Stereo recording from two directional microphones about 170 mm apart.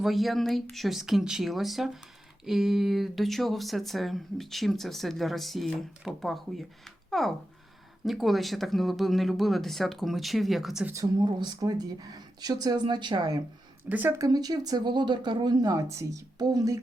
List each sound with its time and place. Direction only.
0.0 s speech: centre (ahead or behind)
10.9 s speech: 20° right (ahead or behind)
13.8 s speech: 10° right (ahead or behind)